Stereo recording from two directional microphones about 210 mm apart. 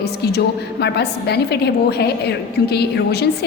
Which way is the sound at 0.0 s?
50° left (ahead or behind).